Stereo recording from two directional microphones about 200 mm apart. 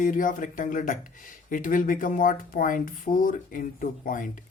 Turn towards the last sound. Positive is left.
turn(degrees=40)  # may be behind; listen again after turning